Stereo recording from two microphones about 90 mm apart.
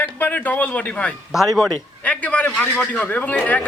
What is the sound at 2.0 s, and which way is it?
Speech, 15° left (ahead or behind).